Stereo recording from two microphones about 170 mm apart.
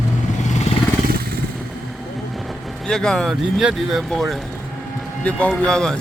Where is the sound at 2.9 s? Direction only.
5° left (ahead or behind).